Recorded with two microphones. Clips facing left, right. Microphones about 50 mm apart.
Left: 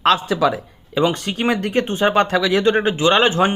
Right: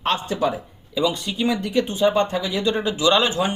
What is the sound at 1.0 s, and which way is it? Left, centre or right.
Speech, left.